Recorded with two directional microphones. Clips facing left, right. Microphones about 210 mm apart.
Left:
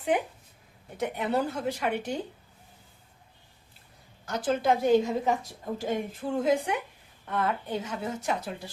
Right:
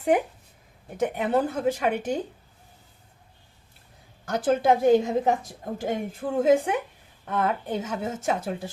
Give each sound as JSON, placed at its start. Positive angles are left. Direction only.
{"t": 0.9, "sound": "a woman's voice", "side_deg": -50}
{"t": 4.3, "sound": "a woman's voice", "side_deg": -50}